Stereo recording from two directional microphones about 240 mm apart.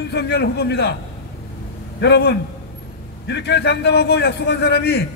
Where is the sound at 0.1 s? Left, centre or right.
Left.